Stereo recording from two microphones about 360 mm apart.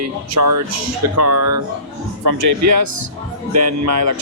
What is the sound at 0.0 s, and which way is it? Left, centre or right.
A man's voice, right.